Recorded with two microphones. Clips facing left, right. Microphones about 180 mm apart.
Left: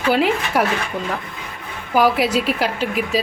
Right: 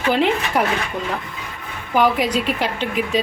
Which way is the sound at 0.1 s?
5° left (ahead or behind).